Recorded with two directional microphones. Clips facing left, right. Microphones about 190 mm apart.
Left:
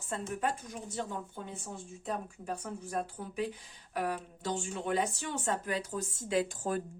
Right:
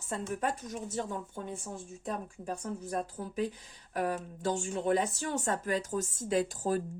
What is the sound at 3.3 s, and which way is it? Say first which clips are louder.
Speech: right 2 dB; 40° right (ahead or behind).